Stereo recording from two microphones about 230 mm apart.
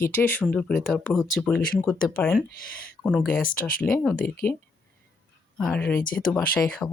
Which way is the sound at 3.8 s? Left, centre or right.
Centre.